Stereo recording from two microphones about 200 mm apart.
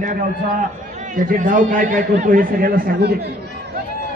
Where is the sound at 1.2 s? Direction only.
40° right (ahead or behind).